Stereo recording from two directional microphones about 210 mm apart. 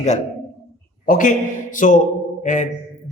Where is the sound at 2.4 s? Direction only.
35° left (ahead or behind).